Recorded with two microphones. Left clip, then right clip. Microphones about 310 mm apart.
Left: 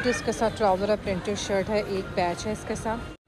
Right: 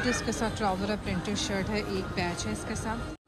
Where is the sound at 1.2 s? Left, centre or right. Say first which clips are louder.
Left 3 dB; right.